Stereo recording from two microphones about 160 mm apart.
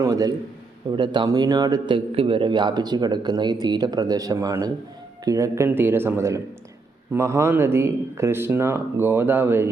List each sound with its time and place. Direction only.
0.0 s speech: 20° right (ahead or behind)